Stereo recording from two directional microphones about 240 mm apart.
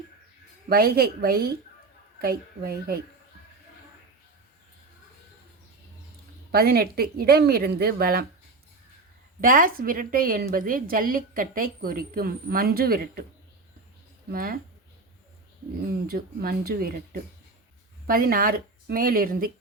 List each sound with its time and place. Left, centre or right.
0.7 s a woman's voice: right
6.5 s a woman's voice: right
9.4 s a woman's voice: right
14.3 s a woman's voice: right
15.9 s a woman's voice: right